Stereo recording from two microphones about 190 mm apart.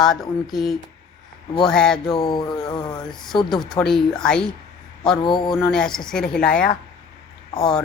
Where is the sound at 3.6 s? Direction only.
Centre (ahead or behind).